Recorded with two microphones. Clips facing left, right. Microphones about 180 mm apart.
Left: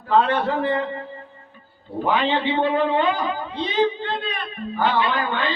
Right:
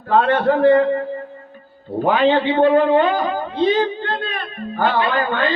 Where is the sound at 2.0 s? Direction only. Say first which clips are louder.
Right 6 dB; 45° right (ahead or behind).